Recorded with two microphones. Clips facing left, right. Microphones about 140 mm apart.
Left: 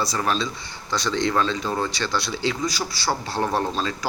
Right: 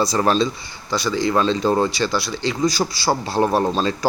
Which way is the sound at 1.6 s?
35° right (ahead or behind).